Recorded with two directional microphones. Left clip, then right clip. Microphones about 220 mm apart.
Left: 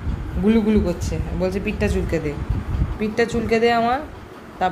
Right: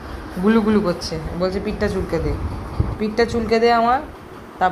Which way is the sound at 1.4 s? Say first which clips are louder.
Right 1 dB; 30° left (ahead or behind).